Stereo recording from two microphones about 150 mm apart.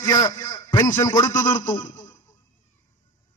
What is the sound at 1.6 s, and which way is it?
Speech, 60° left (ahead or behind).